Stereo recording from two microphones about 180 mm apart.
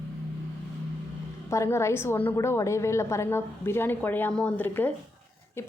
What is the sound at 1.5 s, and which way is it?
A woman's voice, 15° left (ahead or behind).